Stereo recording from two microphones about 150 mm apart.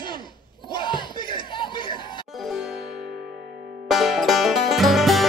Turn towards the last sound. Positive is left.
turn(degrees=0)  # may be behind; listen again after turning